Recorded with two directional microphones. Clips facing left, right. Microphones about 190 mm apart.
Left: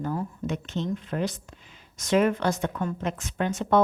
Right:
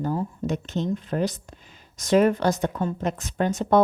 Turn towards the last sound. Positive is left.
turn(degrees=-40)  # may be behind; listen again after turning